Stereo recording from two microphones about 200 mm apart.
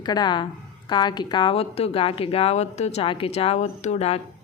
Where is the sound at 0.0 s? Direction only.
20° left (ahead or behind).